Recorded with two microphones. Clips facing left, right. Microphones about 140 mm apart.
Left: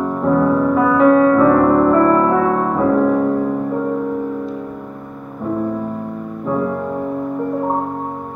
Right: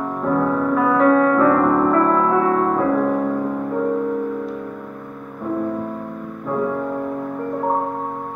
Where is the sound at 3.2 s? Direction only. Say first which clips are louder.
Left 4 dB; 20° left (ahead or behind).